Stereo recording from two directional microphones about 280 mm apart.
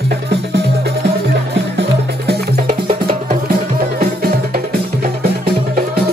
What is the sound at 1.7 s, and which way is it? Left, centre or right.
Music, right.